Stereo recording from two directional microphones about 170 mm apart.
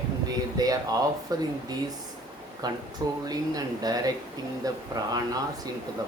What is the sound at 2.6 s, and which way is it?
Speech, 25° right (ahead or behind).